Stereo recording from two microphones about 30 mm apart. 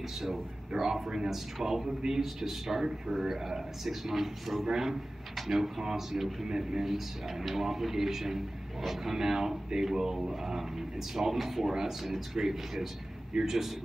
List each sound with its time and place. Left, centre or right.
0.7 s a man's voice: centre
6.9 s a man's voice: centre
9.1 s a man's voice: centre